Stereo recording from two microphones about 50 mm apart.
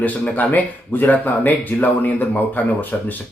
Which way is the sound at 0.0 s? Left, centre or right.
Left.